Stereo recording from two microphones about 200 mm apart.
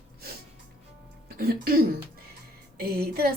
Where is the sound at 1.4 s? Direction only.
50° right (ahead or behind).